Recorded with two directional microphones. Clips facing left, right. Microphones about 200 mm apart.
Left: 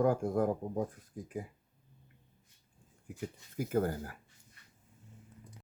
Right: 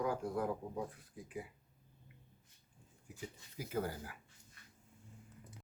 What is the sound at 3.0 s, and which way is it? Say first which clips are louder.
Speech: left 7 dB; 50° left (ahead or behind).